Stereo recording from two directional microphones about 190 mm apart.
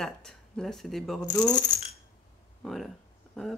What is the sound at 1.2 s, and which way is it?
Speech, 20° left (ahead or behind).